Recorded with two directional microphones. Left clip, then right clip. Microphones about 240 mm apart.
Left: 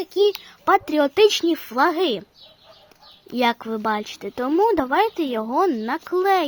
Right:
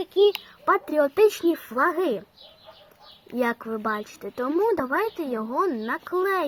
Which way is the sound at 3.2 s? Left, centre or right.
Left.